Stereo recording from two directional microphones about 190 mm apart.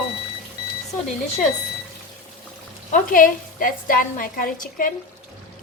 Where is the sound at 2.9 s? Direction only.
45° left (ahead or behind).